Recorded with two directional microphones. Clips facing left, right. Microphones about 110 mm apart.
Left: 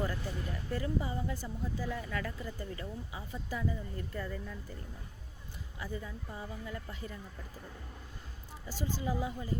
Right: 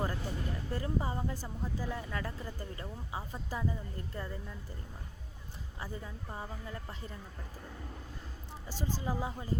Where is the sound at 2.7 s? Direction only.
35° right (ahead or behind).